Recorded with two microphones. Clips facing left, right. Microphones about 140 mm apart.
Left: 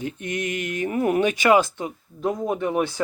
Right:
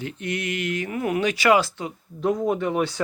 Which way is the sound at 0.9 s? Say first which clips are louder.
Left 5 dB; 35° left (ahead or behind).